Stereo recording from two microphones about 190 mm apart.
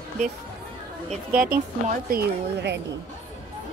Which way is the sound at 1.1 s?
45° right (ahead or behind).